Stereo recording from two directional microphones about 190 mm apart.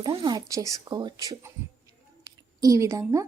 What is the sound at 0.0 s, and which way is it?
Speech, 25° right (ahead or behind).